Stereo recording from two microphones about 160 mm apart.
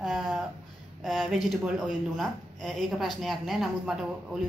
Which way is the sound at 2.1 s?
Centre (ahead or behind).